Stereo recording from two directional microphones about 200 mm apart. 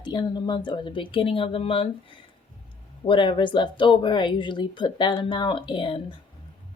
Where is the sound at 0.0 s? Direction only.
20° left (ahead or behind).